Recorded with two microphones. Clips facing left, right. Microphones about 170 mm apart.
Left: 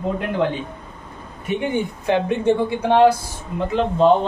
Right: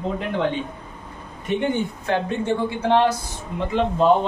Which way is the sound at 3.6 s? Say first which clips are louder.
Left 2 dB; centre (ahead or behind).